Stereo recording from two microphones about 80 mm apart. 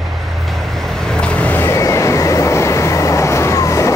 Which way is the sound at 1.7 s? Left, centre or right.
Left.